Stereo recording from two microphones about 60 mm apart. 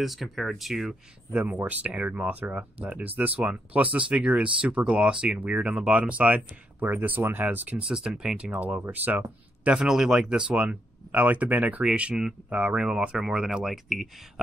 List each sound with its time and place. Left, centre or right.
0.0 s speech: centre
1.3 s speech: right
1.7 s speech: right
6.8 s speech: right
7.7 s speech: centre
8.4 s speech: right
9.7 s speech: centre